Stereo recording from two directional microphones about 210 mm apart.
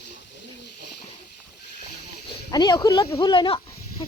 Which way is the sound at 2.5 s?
20° left (ahead or behind).